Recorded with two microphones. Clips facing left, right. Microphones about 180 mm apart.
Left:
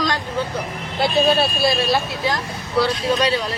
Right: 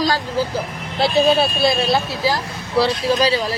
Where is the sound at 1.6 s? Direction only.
25° right (ahead or behind).